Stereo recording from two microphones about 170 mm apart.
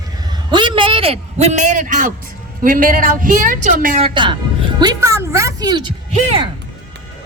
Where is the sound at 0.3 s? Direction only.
30° right (ahead or behind); by 4.0 s 50° right (ahead or behind).